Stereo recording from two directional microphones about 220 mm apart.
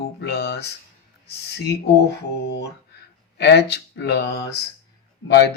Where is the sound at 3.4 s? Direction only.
50° left (ahead or behind).